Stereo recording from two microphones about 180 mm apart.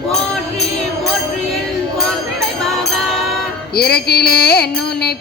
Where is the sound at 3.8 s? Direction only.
60° left (ahead or behind).